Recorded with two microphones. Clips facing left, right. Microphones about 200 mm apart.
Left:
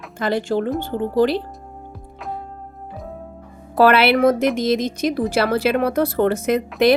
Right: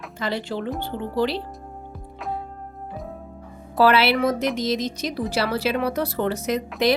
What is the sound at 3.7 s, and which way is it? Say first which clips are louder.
A woman's voice: left 4 dB; 55° left (ahead or behind).